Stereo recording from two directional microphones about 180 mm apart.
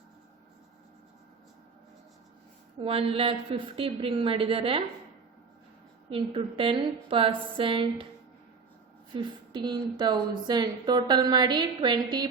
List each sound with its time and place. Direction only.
2.8 s a woman's voice: 30° right (ahead or behind)
6.1 s a woman's voice: 30° right (ahead or behind)
9.1 s a woman's voice: 25° right (ahead or behind)